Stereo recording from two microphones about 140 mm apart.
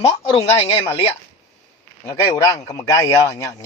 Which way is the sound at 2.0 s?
30° left (ahead or behind).